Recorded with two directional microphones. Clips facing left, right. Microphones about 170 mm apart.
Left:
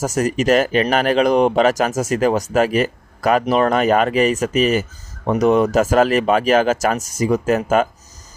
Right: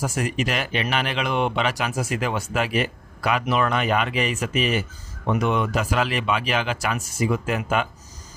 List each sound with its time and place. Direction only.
0.0 s speech: 40° left (ahead or behind)